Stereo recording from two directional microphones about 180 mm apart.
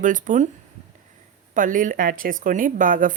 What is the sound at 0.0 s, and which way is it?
Speech, 45° right (ahead or behind).